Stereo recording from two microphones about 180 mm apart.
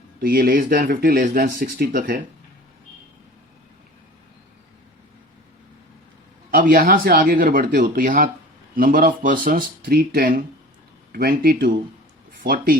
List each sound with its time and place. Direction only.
0.2 s speech: 55° right (ahead or behind)
6.5 s speech: 50° right (ahead or behind)